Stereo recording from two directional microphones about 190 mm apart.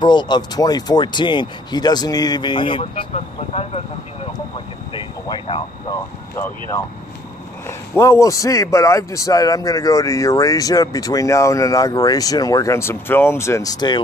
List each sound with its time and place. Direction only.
0.0 s speech: 25° left (ahead or behind)
4.3 s vehicle: 25° left (ahead or behind)
7.6 s a man's voice: 15° left (ahead or behind)